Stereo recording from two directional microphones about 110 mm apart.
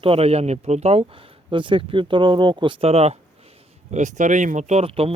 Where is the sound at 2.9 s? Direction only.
70° right (ahead or behind).